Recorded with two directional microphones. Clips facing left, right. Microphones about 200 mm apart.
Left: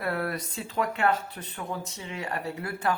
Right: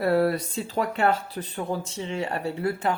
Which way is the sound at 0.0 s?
30° right (ahead or behind).